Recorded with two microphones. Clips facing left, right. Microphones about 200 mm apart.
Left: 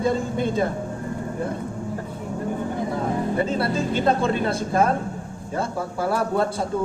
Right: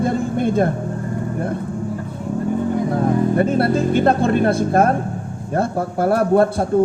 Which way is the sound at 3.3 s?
55° right (ahead or behind).